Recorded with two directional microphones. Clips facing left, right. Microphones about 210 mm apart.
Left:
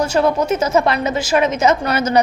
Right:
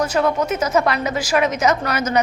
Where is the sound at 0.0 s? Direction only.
30° left (ahead or behind).